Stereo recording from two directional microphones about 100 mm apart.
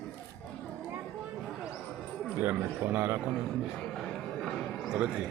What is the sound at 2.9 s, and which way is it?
Speech, 25° right (ahead or behind).